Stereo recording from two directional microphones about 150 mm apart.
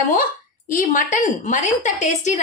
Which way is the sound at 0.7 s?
60° left (ahead or behind).